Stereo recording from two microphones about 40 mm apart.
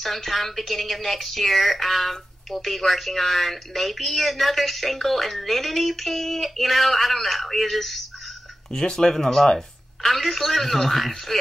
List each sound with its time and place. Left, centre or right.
0.0 s a woman's voice: centre
8.7 s a woman's voice: centre